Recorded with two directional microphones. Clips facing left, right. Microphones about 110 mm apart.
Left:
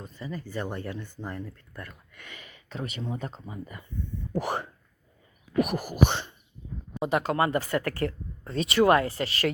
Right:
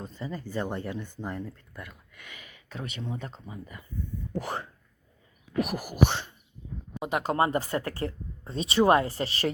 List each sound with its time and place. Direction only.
0.0 s speech: 25° right (ahead or behind)
1.7 s speech: 5° right (ahead or behind)
4.4 s speech: 15° left (ahead or behind)
5.5 s speech: 5° right (ahead or behind)
7.3 s speech: 30° right (ahead or behind)
7.7 s speech: 20° right (ahead or behind)